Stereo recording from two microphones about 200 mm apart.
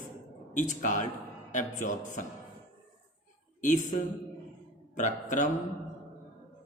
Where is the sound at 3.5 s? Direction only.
40° left (ahead or behind).